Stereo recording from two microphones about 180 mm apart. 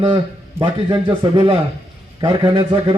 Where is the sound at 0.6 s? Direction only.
30° right (ahead or behind).